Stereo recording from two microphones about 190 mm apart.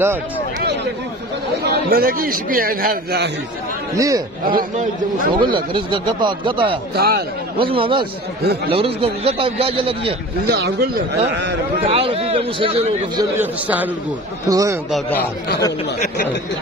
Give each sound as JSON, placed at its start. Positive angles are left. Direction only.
{"t": 1.6, "sound": "a man's voice", "side_deg": -55}
{"t": 3.9, "sound": "a man's voice", "side_deg": -15}
{"t": 4.5, "sound": "a man's voice", "side_deg": -50}
{"t": 5.3, "sound": "speech", "side_deg": -25}
{"t": 7.0, "sound": "speech", "side_deg": -55}
{"t": 7.5, "sound": "speech", "side_deg": -30}
{"t": 10.5, "sound": "speech", "side_deg": -55}
{"t": 11.8, "sound": "a man's voice", "side_deg": -30}
{"t": 13.2, "sound": "a man's voice", "side_deg": -10}
{"t": 14.9, "sound": "speech", "side_deg": 5}